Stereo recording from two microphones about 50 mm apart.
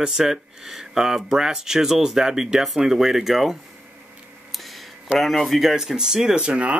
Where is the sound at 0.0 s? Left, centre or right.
Centre.